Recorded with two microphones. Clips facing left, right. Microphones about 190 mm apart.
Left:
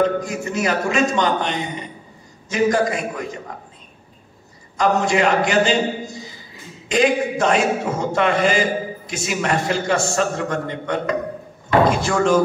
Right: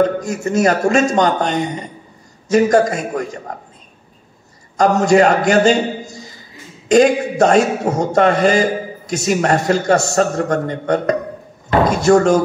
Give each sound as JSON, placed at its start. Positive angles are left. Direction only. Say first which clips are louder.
{"t": 0.0, "sound": "a man's voice", "louder": "right 3 dB", "side_deg": -45}
{"t": 4.7, "sound": "a man's voice", "louder": "right 6 dB", "side_deg": -45}